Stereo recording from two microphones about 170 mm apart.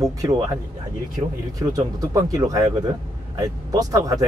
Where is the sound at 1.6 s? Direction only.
20° right (ahead or behind).